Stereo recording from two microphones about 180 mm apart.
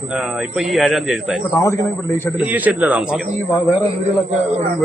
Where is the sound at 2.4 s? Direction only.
10° right (ahead or behind).